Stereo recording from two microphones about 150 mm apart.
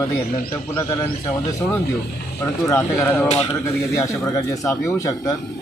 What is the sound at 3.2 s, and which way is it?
Speech, 45° left (ahead or behind).